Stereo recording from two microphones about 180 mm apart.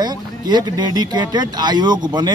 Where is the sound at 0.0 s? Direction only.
25° right (ahead or behind).